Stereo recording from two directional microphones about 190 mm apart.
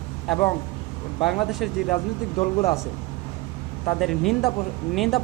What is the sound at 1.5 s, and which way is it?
Speech, centre (ahead or behind).